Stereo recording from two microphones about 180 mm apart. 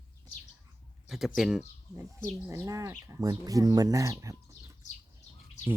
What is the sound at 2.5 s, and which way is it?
Speech, 15° right (ahead or behind).